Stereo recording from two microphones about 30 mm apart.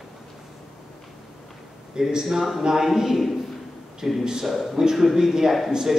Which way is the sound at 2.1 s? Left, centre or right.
Centre.